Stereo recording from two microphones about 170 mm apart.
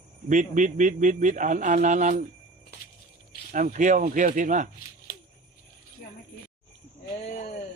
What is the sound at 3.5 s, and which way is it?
Speech, 50° right (ahead or behind).